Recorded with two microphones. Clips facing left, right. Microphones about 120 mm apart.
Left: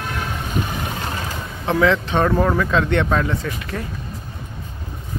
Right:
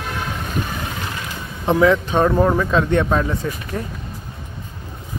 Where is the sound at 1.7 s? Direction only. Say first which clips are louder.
Right 2 dB; 15° right (ahead or behind).